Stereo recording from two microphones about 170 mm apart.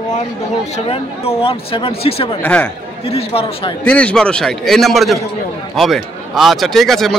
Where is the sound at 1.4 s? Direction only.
35° left (ahead or behind).